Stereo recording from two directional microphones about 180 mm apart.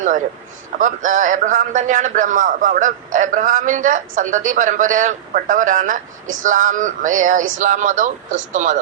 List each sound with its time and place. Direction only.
0.8 s a man's voice: 45° right (ahead or behind)